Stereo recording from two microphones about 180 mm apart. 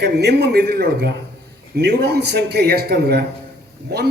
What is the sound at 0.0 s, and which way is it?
A man's voice, 65° right (ahead or behind).